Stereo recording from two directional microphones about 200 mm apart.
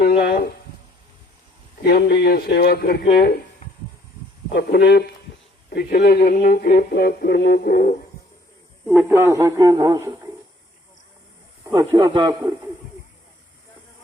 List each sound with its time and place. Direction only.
0.2 s a sound: 50° left (ahead or behind)
1.8 s speech: 55° left (ahead or behind)
4.4 s speech: 50° left (ahead or behind)
8.9 s a man's voice: 5° right (ahead or behind)
11.6 s a man's voice: 15° right (ahead or behind)